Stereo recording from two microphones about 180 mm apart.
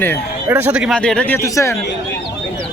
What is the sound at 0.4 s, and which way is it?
Speech, 10° right (ahead or behind).